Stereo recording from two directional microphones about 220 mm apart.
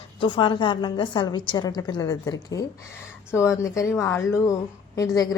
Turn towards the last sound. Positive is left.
turn(degrees=15)  # may be behind; listen again after turning